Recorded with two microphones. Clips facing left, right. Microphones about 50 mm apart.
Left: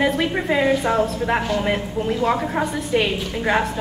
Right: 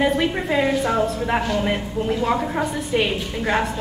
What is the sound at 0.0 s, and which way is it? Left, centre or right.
A woman's voice, centre.